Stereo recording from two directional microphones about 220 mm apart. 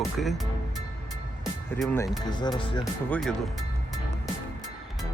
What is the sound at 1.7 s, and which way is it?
Speech, 5° left (ahead or behind).